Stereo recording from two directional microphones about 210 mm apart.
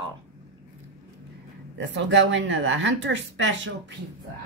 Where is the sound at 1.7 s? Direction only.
60° right (ahead or behind).